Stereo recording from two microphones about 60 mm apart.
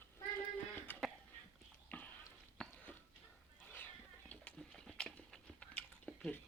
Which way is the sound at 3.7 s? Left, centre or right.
Left.